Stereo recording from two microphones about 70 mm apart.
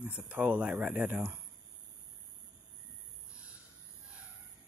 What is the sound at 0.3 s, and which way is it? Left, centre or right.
Speech, right.